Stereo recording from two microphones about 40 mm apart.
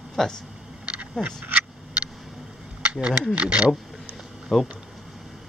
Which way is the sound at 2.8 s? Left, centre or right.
Right.